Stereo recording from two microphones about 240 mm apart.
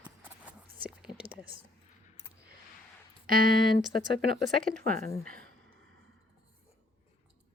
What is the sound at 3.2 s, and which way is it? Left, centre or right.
Speech, right.